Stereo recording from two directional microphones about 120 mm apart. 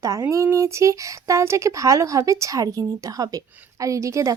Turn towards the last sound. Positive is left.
turn(degrees=-25)  # may be behind; listen again after turning